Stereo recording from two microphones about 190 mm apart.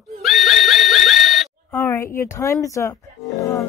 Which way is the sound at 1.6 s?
15° left (ahead or behind).